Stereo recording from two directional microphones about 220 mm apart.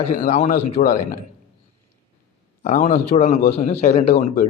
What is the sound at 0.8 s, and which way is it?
Speech, 45° left (ahead or behind).